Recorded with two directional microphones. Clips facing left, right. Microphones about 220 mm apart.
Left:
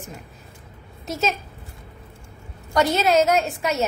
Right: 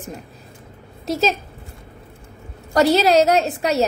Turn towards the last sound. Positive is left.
turn(degrees=-35)  # may be behind; listen again after turning